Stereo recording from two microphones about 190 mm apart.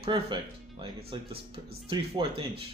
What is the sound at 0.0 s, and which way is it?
Speech, 25° right (ahead or behind).